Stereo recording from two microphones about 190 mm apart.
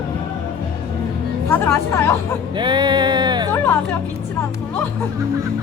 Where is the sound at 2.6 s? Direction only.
25° right (ahead or behind).